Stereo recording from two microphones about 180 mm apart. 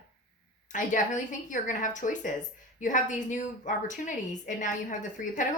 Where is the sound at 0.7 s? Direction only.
45° left (ahead or behind).